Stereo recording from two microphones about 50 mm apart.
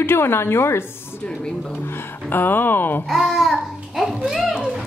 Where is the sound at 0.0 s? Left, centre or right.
Left.